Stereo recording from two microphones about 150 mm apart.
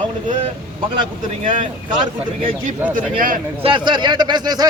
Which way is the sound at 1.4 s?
60° right (ahead or behind).